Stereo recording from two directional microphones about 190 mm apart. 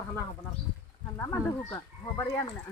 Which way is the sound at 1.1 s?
15° left (ahead or behind).